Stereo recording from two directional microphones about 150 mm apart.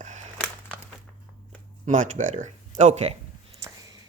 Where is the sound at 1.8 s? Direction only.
55° right (ahead or behind).